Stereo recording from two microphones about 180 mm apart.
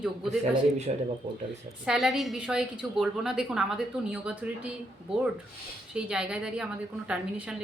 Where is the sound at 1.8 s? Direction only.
Centre (ahead or behind).